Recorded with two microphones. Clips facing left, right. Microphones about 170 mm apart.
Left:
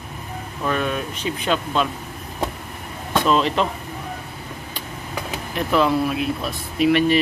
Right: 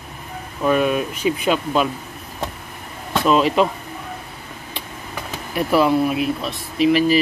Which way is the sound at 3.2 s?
5° right (ahead or behind).